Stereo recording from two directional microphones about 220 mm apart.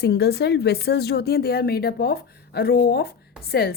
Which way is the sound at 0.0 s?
45° left (ahead or behind).